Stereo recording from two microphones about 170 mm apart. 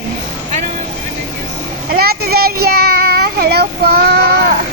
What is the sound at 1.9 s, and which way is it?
A child's voice, 65° right (ahead or behind).